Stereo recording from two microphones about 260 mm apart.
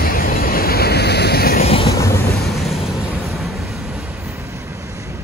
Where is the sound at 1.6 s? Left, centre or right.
Left.